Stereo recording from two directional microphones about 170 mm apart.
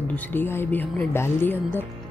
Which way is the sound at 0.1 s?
10° left (ahead or behind).